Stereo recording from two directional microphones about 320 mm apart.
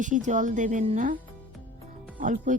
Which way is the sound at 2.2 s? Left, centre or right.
Right.